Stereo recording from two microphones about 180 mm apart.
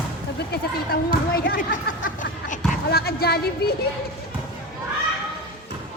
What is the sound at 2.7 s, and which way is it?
Speech, 60° left (ahead or behind).